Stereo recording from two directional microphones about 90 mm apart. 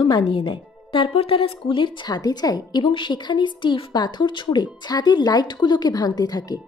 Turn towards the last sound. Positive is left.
turn(degrees=50)  # may be behind; listen again after turning